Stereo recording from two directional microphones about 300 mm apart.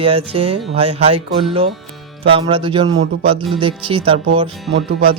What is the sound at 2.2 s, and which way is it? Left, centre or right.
Speech, centre.